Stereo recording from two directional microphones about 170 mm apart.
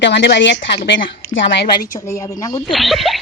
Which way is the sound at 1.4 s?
80° left.